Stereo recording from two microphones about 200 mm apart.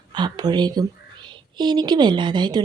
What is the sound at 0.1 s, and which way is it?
A woman's voice, 20° right (ahead or behind).